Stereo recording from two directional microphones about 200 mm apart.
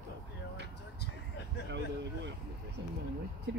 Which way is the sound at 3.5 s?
65° right (ahead or behind).